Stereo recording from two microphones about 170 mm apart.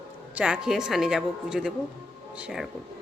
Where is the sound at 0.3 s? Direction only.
5° right (ahead or behind).